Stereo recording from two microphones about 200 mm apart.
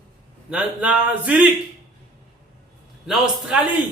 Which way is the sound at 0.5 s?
5° right (ahead or behind).